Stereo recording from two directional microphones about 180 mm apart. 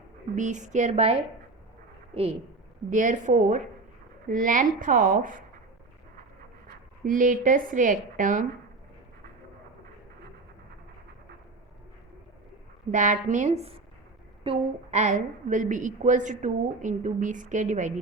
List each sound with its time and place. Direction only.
0.3 s speech: 40° right (ahead or behind)
2.1 s speech: 35° right (ahead or behind)
2.9 s a woman's voice: 45° right (ahead or behind)
7.0 s a woman's voice: 50° right (ahead or behind)
12.9 s a woman's voice: 45° right (ahead or behind)